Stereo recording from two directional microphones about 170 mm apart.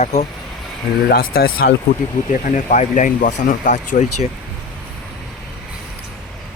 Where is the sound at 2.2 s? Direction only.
50° left (ahead or behind).